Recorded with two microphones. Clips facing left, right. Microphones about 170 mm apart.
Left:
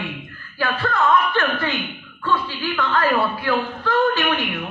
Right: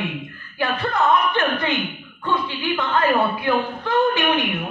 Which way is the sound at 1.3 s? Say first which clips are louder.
Right 1 dB; 20° right (ahead or behind).